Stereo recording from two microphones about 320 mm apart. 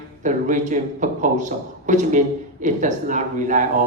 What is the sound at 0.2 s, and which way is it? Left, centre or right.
A man's voice, right.